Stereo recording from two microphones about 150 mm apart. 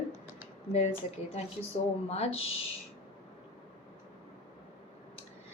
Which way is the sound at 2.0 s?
45° left (ahead or behind).